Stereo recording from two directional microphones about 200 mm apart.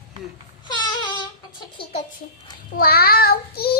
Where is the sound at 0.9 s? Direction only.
20° left (ahead or behind).